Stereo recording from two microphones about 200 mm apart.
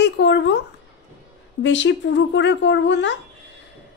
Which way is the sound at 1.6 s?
65° left (ahead or behind).